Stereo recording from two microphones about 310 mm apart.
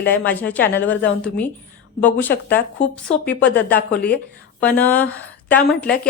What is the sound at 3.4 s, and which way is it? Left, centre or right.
A woman's voice, centre.